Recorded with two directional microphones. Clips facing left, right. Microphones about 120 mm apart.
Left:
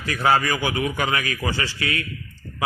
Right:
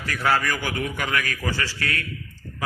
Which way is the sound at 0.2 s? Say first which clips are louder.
Left 3 dB; 25° left (ahead or behind).